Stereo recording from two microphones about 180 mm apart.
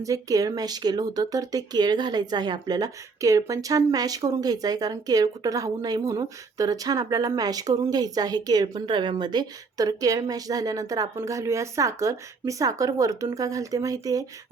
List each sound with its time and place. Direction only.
0.0 s speech: 20° right (ahead or behind)